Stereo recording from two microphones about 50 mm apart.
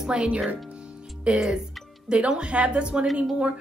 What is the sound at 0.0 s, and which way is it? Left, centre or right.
Speech, centre.